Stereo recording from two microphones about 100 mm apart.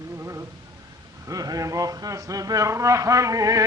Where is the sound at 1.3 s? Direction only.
35° right (ahead or behind).